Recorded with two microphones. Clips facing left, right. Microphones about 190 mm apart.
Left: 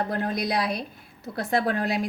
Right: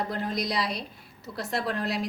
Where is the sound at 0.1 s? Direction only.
55° left (ahead or behind).